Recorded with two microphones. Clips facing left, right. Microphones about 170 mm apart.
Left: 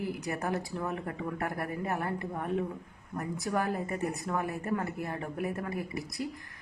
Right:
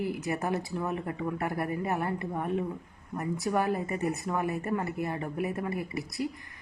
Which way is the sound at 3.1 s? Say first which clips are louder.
Right 2 dB; 15° right (ahead or behind).